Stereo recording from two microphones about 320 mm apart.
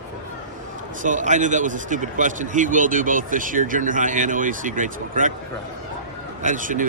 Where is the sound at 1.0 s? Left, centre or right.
Right.